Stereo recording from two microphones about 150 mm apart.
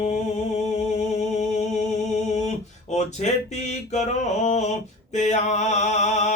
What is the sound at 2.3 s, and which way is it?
Music, 50° left (ahead or behind).